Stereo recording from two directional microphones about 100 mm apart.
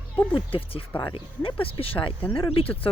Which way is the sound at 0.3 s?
60° left (ahead or behind).